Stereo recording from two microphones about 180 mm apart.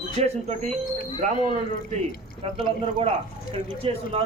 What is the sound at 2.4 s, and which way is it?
Speech, 30° right (ahead or behind).